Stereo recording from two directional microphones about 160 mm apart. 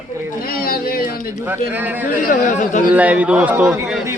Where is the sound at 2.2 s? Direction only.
55° left (ahead or behind).